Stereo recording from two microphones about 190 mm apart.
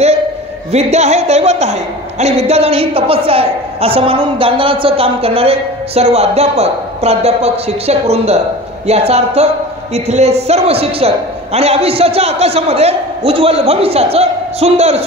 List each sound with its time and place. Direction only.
0.7 s a woman's voice: 35° right (ahead or behind)